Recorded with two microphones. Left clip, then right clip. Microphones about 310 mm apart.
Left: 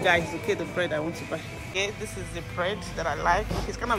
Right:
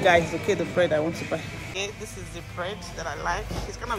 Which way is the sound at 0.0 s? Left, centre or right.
Centre.